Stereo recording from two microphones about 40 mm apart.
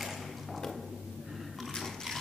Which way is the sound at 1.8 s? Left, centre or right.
Centre.